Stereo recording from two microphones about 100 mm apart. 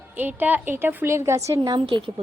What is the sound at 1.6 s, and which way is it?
Speech, 50° right (ahead or behind).